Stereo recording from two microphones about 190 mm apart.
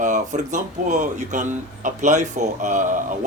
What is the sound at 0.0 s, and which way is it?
Speech, 40° right (ahead or behind).